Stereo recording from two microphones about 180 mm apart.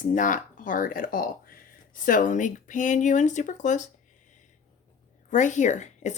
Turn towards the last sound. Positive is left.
turn(degrees=40)  # may be behind; listen again after turning